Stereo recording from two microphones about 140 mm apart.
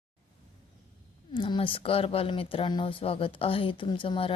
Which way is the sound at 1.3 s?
40° left (ahead or behind).